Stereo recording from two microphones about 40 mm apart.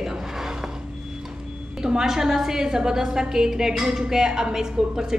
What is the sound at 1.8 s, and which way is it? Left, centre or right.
A woman's voice, centre.